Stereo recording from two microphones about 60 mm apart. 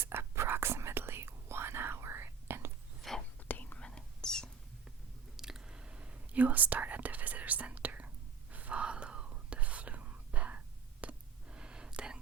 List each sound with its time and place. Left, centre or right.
0.0 s whispering: right
3.1 s whispering: centre
3.5 s whispering: left
3.8 s whispering: centre
5.4 s whispering: centre